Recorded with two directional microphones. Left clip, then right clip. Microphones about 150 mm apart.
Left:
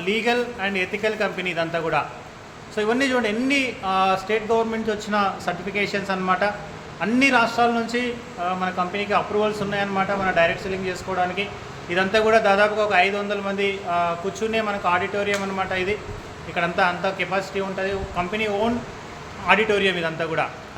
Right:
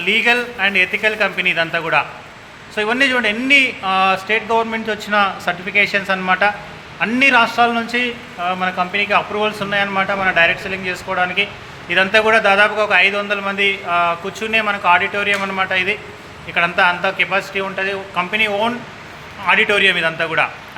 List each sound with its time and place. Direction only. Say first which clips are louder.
0.0 s a man's voice: right 7 dB; 10° right (ahead or behind)